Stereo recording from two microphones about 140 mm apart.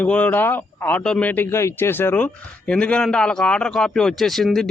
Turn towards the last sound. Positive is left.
turn(degrees=0)  # may be behind; listen again after turning